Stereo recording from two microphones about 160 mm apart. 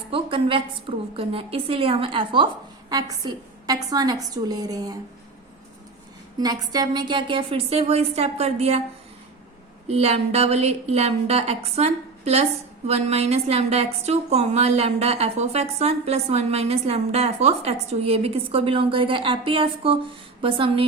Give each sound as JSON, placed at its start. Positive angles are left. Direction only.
{"t": 0.1, "sound": "a woman's voice", "side_deg": -35}
{"t": 6.4, "sound": "a woman's voice", "side_deg": -25}
{"t": 9.8, "sound": "a woman's voice", "side_deg": -40}